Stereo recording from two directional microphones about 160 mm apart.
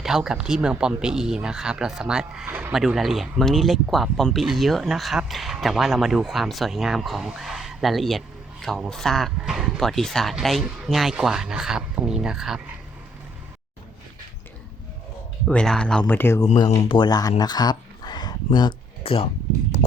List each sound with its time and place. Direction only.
0.0 s speech: 5° right (ahead or behind)
15.4 s speech: 5° left (ahead or behind)
16.8 s speech: 30° left (ahead or behind)